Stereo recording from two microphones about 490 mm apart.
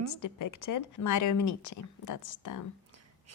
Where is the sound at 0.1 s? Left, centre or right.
Left.